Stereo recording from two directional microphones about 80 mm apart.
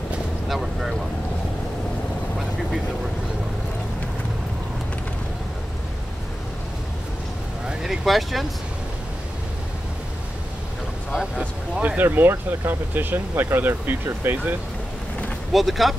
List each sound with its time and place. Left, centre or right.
0.5 s boat: centre
7.8 s speech: centre
11.8 s speech: right
15.5 s speech: centre